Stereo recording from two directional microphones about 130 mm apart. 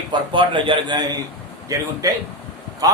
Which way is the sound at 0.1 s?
40° right (ahead or behind).